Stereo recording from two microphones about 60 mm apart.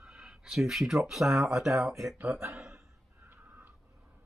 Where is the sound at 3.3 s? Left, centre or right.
Right.